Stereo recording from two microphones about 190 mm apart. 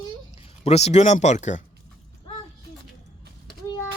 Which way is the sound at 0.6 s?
35° left (ahead or behind).